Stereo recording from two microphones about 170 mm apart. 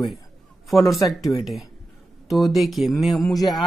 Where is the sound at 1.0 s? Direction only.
20° left (ahead or behind).